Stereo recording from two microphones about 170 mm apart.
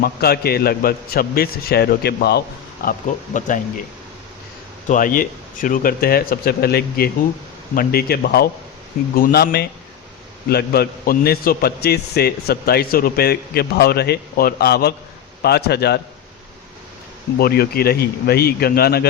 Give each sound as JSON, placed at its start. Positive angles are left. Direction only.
{"t": 0.0, "sound": "a man's voice", "side_deg": 65}
{"t": 2.8, "sound": "a man's voice", "side_deg": 60}
{"t": 3.3, "sound": "speech", "side_deg": 50}
{"t": 4.9, "sound": "a man's voice", "side_deg": 55}
{"t": 17.3, "sound": "a man's voice", "side_deg": 65}